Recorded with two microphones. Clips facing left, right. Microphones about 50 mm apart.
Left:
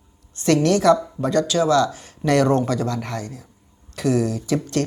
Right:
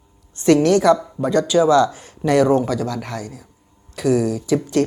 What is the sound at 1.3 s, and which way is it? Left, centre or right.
Speech, centre.